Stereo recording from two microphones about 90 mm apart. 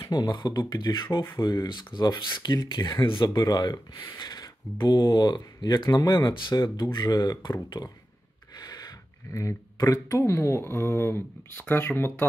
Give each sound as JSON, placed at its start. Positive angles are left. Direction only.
{"t": 0.1, "sound": "speech", "side_deg": 50}
{"t": 3.4, "sound": "speech", "side_deg": 50}
{"t": 5.9, "sound": "speech", "side_deg": 35}
{"t": 6.1, "sound": "speech", "side_deg": 55}
{"t": 8.5, "sound": "speech", "side_deg": 45}